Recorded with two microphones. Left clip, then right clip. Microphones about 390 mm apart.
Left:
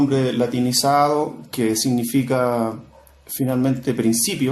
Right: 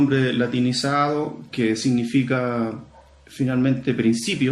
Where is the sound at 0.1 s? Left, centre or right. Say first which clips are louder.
Left 1 dB; centre.